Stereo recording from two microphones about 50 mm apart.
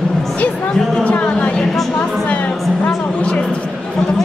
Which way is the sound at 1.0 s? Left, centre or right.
Left.